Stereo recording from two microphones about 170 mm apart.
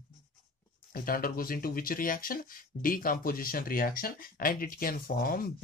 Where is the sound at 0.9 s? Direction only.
55° left (ahead or behind).